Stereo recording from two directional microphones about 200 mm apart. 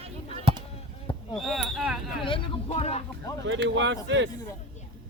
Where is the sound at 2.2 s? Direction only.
25° left (ahead or behind).